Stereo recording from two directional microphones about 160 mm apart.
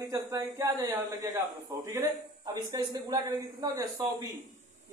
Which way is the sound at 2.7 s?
25° right (ahead or behind).